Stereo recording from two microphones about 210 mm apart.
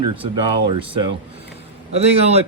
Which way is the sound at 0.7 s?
25° right (ahead or behind).